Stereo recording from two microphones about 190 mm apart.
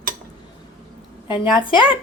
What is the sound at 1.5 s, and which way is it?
Speech, 25° left (ahead or behind).